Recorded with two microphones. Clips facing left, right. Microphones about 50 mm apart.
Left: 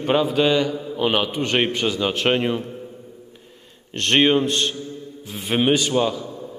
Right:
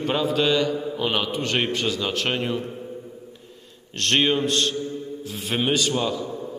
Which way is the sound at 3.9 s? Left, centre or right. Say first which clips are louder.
Left 4 dB; left.